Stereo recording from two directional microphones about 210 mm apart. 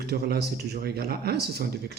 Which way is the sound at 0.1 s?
50° right (ahead or behind).